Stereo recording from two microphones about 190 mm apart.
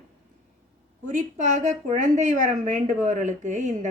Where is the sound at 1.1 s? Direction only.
40° right (ahead or behind).